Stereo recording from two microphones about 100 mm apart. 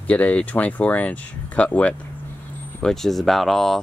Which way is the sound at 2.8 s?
5° left (ahead or behind).